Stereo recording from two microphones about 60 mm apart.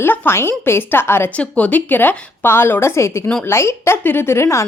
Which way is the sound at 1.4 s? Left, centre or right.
Left.